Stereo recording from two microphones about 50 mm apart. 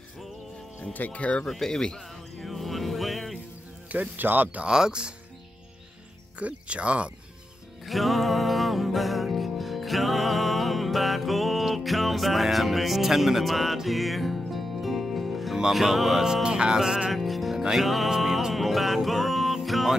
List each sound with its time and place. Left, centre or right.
0.9 s speech: left
1.5 s speech: centre
2.4 s music: centre
3.9 s speech: right
4.6 s music: centre
6.4 s speech: right
7.8 s music: centre
16.4 s music: centre
17.1 s music: centre